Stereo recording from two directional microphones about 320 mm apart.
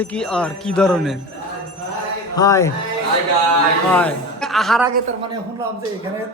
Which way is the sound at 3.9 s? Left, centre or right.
Centre.